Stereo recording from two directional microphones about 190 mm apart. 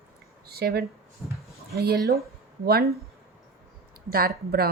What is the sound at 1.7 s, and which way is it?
Speech, 55° right (ahead or behind).